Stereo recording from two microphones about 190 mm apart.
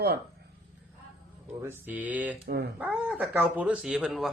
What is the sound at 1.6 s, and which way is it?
Mantra, 10° right (ahead or behind).